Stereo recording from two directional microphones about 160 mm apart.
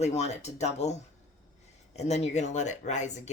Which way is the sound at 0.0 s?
45° left (ahead or behind).